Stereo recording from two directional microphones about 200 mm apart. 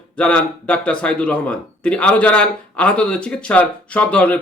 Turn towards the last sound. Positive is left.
turn(degrees=5)  # may be behind; listen again after turning